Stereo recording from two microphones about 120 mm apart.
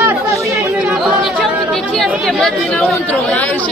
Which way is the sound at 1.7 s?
5° left (ahead or behind).